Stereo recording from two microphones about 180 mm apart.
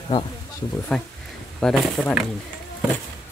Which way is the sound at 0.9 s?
5° left (ahead or behind).